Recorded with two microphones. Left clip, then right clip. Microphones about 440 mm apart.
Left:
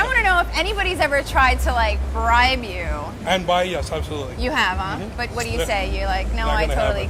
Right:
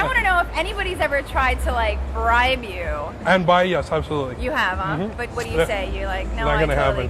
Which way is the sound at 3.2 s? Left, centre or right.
Right.